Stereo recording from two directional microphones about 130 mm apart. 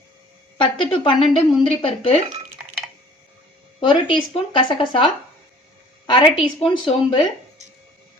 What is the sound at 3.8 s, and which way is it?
A woman's voice, 40° left (ahead or behind).